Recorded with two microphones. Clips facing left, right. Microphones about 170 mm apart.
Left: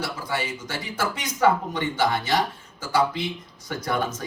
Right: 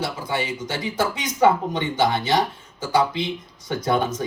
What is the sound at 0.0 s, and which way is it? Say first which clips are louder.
Speech: right 3 dB; 20° right (ahead or behind).